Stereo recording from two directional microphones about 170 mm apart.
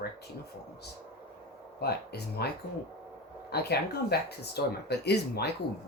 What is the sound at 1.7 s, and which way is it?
Speech, 70° left (ahead or behind).